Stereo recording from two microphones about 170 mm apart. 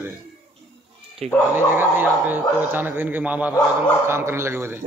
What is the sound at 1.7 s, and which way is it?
Speech, 10° right (ahead or behind).